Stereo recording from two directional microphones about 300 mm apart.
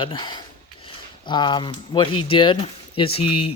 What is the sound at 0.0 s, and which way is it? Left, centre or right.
Speech, centre.